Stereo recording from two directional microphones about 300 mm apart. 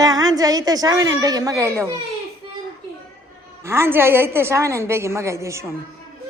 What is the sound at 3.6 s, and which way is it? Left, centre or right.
A woman's voice, centre.